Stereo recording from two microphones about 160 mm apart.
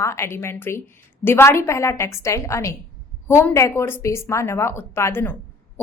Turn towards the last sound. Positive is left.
turn(degrees=15)  # may be behind; listen again after turning